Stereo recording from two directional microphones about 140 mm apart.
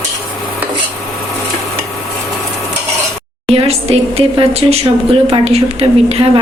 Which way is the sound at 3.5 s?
45° right (ahead or behind).